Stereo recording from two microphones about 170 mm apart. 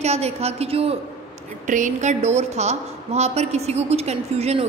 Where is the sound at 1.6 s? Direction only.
45° right (ahead or behind).